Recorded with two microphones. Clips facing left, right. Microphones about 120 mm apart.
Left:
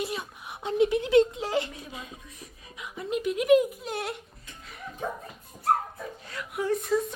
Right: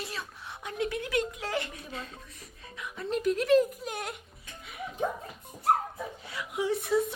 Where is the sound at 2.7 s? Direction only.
20° left (ahead or behind).